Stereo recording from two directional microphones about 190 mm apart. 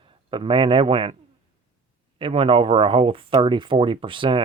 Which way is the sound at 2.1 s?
30° right (ahead or behind).